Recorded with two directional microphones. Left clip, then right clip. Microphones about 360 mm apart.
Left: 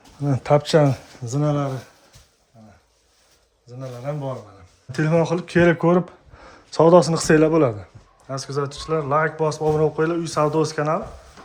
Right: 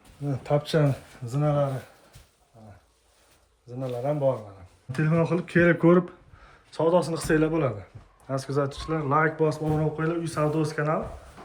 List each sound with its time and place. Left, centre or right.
0.4 s a man's voice: left
3.8 s speech: centre
4.9 s a man's voice: centre
8.3 s a man's voice: centre